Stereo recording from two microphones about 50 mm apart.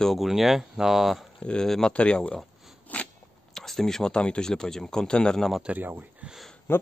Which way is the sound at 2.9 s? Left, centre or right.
Left.